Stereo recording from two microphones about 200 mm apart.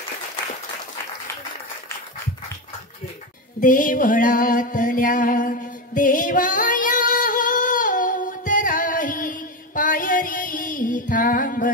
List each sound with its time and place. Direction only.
3.6 s music: 40° left (ahead or behind)